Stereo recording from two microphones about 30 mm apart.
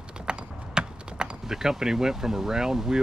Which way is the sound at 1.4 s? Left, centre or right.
Centre.